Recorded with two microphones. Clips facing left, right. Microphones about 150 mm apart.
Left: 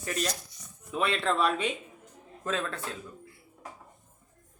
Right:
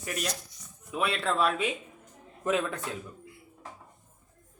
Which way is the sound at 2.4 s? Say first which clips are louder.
Right 4 dB; 15° right (ahead or behind).